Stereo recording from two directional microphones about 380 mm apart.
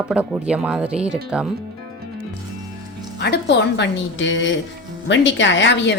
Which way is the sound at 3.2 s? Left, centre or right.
Left.